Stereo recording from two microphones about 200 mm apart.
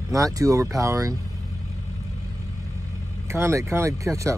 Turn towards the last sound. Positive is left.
turn(degrees=-15)  # may be behind; listen again after turning